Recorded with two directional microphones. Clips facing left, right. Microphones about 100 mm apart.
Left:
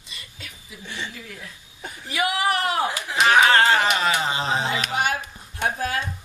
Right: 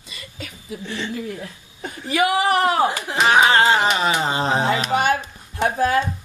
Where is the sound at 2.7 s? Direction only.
45° right (ahead or behind).